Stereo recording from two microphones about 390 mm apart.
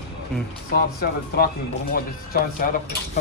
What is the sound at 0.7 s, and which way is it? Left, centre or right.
Speech, left.